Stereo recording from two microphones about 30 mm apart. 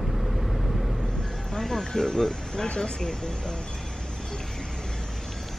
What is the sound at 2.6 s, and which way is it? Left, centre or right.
Speech, left.